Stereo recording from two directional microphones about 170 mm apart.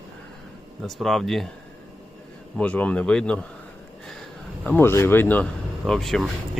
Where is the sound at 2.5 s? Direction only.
10° left (ahead or behind).